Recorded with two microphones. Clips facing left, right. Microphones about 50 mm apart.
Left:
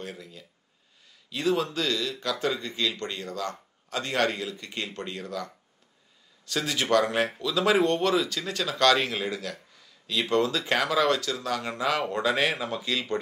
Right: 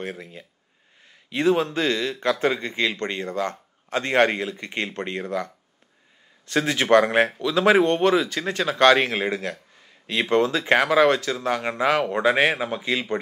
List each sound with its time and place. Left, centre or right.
0.0 s speech: right